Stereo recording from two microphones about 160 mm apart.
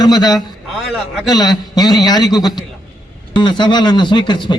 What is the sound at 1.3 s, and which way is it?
A man's voice, 25° left (ahead or behind).